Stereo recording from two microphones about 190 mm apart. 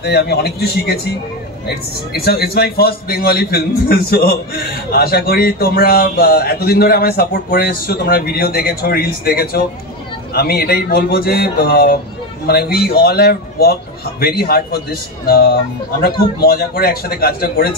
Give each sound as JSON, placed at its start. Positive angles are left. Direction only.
{"t": 0.0, "sound": "a man's voice", "side_deg": 60}
{"t": 2.1, "sound": "a man's voice", "side_deg": 55}